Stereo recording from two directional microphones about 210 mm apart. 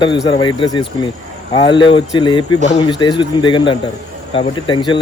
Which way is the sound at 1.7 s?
25° left (ahead or behind).